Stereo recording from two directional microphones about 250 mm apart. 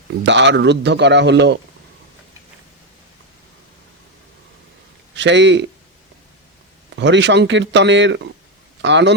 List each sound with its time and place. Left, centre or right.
0.3 s speech: right
5.1 s a man's voice: right
6.9 s speech: right